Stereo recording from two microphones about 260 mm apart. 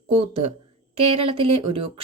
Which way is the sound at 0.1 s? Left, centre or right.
Right.